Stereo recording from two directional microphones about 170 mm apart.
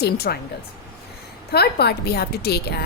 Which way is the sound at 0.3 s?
65° left (ahead or behind).